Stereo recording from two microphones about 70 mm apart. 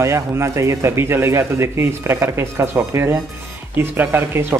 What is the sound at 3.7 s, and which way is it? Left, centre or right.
Speech, right.